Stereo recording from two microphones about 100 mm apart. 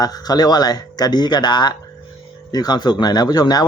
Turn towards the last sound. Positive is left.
turn(degrees=40)  # may be behind; listen again after turning